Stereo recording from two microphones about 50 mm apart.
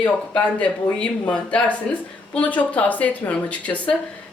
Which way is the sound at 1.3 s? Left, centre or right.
Left.